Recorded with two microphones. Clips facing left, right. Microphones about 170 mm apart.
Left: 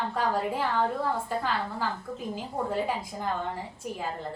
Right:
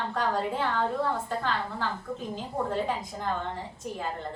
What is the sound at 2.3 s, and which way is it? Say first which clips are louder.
Speech: even; 10° left (ahead or behind).